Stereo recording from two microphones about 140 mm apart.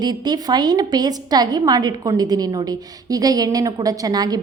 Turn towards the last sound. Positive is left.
turn(degrees=-30)  # may be behind; listen again after turning